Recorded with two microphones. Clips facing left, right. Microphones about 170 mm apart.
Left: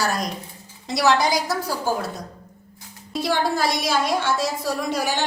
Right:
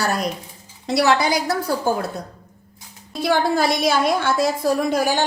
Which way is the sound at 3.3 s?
55° right (ahead or behind).